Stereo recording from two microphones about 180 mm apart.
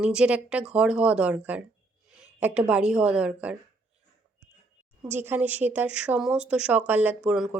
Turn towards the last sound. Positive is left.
turn(degrees=-5)  # may be behind; listen again after turning